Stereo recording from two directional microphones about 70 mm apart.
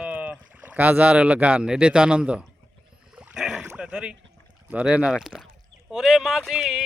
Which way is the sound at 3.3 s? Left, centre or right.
Centre.